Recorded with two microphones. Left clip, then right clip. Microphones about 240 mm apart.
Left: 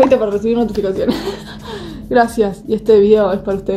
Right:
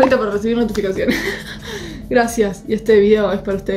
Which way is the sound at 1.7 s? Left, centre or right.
Centre.